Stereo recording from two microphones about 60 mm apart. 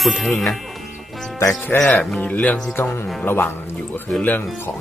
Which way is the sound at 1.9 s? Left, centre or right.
Left.